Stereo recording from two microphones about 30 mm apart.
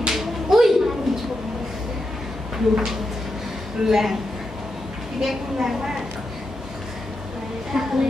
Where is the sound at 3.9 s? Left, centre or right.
Centre.